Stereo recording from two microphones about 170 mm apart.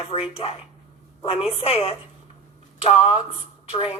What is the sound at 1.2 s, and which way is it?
A woman's voice, 35° left (ahead or behind).